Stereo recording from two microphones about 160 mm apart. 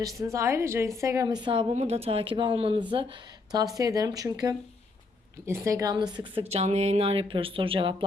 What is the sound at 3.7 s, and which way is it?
A woman's voice, 20° right (ahead or behind).